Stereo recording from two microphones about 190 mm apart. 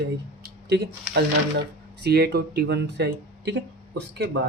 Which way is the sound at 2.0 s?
55° right (ahead or behind).